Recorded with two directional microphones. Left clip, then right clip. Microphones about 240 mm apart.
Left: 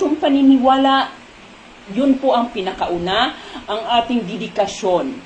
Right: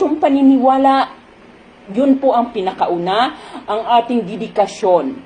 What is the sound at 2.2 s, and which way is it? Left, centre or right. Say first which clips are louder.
A woman's voice: right 2 dB; right.